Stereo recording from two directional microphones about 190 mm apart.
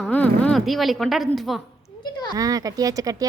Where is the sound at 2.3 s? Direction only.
20° right (ahead or behind).